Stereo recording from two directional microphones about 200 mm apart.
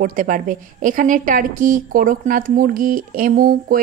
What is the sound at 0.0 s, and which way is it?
A woman's voice, 45° right (ahead or behind).